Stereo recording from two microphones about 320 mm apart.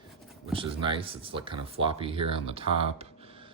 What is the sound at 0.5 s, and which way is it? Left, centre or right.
Speech, centre.